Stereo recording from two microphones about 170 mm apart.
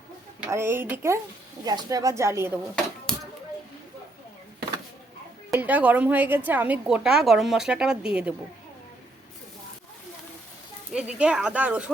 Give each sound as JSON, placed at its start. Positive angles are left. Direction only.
{"t": 0.3, "sound": "a woman's voice", "side_deg": -15}
{"t": 3.1, "sound": "a sound", "side_deg": 5}
{"t": 5.5, "sound": "a woman's voice", "side_deg": -10}
{"t": 10.9, "sound": "a woman's voice", "side_deg": -5}